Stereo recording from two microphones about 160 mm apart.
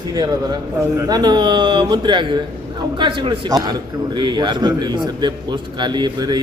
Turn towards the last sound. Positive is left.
turn(degrees=-25)  # may be behind; listen again after turning